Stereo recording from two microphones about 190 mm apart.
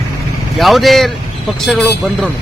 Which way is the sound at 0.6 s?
Centre (ahead or behind).